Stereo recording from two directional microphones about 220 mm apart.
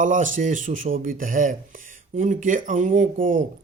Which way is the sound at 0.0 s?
35° right (ahead or behind).